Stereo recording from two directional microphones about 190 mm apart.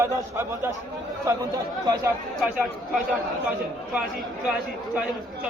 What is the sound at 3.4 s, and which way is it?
Speech, 5° right (ahead or behind).